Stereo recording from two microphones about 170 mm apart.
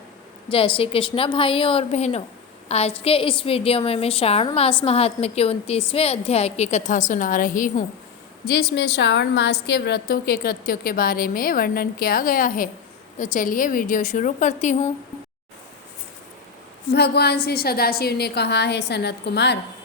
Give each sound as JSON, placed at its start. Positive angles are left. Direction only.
{"t": 0.5, "sound": "a woman's voice", "side_deg": 30}
{"t": 8.4, "sound": "a woman's voice", "side_deg": 70}
{"t": 16.9, "sound": "a woman's voice", "side_deg": 75}